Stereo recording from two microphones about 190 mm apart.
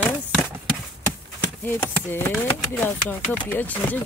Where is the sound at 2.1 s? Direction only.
10° left (ahead or behind).